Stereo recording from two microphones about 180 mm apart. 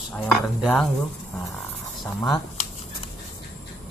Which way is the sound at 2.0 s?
20° left (ahead or behind).